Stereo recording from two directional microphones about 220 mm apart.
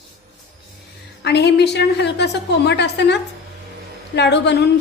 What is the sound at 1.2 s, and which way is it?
A woman's voice, 50° left (ahead or behind).